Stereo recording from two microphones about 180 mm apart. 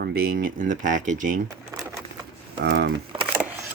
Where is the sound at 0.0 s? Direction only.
60° right (ahead or behind).